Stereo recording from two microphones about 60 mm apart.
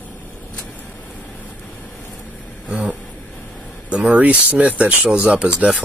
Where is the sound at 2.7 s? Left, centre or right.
Right.